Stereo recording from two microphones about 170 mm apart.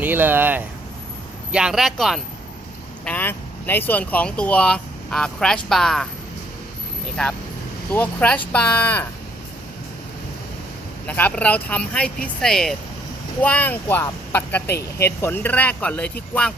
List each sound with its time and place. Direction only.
0.0 s speech: 10° right (ahead or behind)
3.0 s speech: 10° left (ahead or behind)
7.9 s speech: 10° left (ahead or behind)
11.0 s speech: 10° left (ahead or behind)